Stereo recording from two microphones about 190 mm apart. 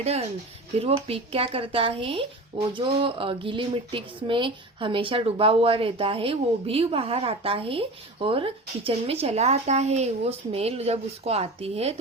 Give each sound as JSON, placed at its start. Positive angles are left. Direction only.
{"t": 0.0, "sound": "speech", "side_deg": -35}